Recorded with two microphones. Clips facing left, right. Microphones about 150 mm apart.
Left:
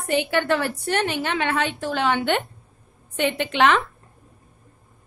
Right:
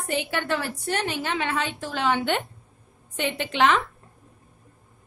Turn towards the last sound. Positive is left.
turn(degrees=65)  # may be behind; listen again after turning